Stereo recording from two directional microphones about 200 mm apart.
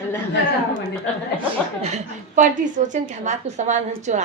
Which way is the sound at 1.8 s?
35° right (ahead or behind).